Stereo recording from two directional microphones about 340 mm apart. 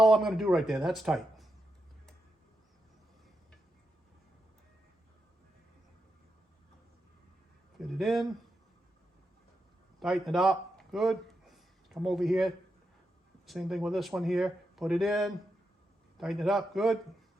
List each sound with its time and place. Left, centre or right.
0.0 s speech: centre
7.8 s speech: centre
10.0 s a man's voice: centre